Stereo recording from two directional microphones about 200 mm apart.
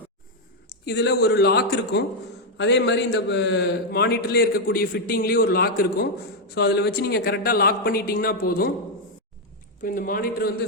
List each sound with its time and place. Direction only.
0.9 s a man's voice: 55° left (ahead or behind)
9.8 s a man's voice: 45° left (ahead or behind)